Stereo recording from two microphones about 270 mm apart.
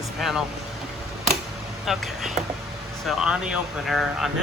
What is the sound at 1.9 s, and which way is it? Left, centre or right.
Speech, centre.